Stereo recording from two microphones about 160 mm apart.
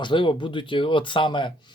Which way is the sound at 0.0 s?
30° left (ahead or behind).